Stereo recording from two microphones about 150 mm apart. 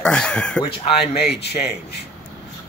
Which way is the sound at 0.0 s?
5° left (ahead or behind).